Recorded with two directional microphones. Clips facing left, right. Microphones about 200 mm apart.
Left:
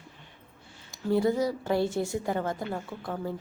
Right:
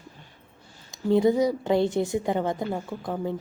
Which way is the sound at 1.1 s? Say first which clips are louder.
Right 5 dB; 20° right (ahead or behind).